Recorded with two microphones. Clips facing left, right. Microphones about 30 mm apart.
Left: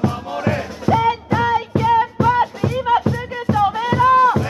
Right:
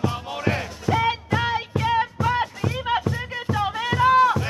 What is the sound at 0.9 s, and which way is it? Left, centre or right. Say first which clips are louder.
Music: left 6 dB; left.